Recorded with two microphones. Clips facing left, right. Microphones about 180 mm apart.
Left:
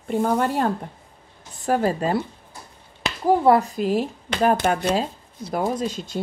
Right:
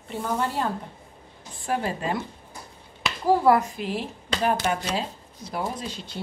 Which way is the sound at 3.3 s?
30° left (ahead or behind).